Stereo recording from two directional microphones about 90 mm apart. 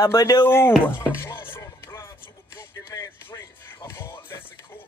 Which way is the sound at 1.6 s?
35° left (ahead or behind).